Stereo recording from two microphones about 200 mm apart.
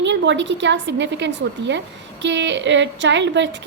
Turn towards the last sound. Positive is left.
turn(degrees=-60)  # may be behind; listen again after turning